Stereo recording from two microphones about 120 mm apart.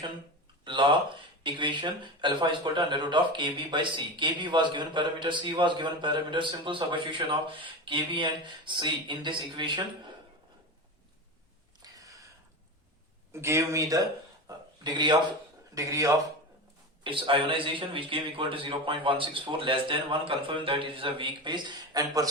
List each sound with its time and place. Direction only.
0.6 s speech: 45° right (ahead or behind)
11.8 s a sound: 30° right (ahead or behind)
13.3 s speech: 25° right (ahead or behind); by 15.2 s 40° right (ahead or behind)
15.7 s a man's voice: 25° right (ahead or behind)
17.0 s a man's voice: 45° right (ahead or behind)